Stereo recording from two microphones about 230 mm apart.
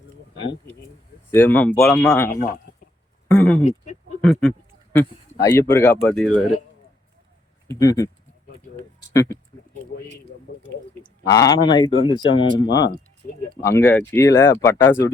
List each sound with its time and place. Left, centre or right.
1.3 s speech: centre
3.3 s speech: centre
3.6 s speech: left
4.2 s speech: centre
4.9 s speech: centre
7.7 s speech: centre
10.6 s speech: centre
12.4 s speech: left
13.7 s speech: centre